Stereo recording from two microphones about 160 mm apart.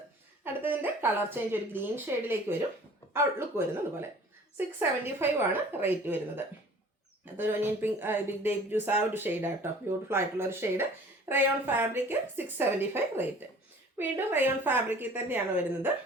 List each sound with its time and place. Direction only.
0.4 s speech: 10° right (ahead or behind)